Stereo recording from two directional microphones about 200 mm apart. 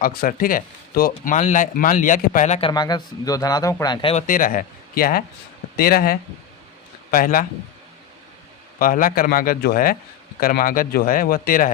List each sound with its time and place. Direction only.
0.0 s speech: 45° left (ahead or behind); by 4.2 s 25° left (ahead or behind)
4.3 s a man's voice: 45° left (ahead or behind)
8.8 s a man's voice: 45° left (ahead or behind)